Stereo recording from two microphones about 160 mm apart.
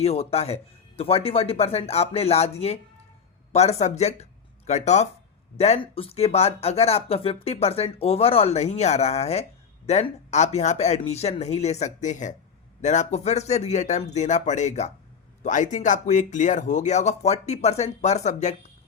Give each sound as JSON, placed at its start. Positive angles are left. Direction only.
{"t": 0.0, "sound": "speech", "side_deg": 40}